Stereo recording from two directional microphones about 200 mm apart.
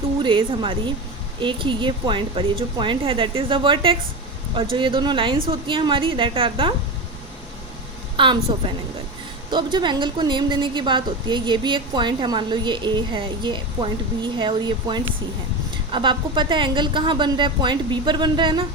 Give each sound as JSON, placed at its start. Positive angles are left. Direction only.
{"t": 0.2, "sound": "a woman's voice", "side_deg": -25}
{"t": 8.1, "sound": "a woman's voice", "side_deg": -25}